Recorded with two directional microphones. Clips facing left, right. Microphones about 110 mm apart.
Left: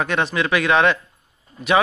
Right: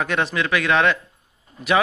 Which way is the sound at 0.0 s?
Centre (ahead or behind).